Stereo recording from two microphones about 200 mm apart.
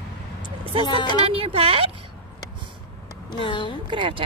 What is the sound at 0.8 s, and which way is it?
Speech, 20° left (ahead or behind).